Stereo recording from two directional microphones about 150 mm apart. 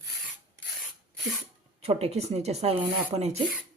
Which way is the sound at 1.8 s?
45° right (ahead or behind).